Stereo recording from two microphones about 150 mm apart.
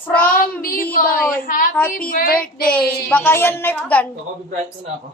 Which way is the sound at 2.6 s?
10° left (ahead or behind).